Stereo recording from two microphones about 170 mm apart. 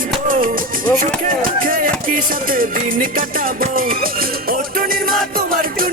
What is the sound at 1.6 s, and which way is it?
Music, 55° right (ahead or behind).